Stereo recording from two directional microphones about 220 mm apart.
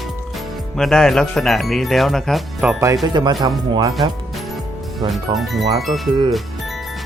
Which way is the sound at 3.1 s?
20° right (ahead or behind).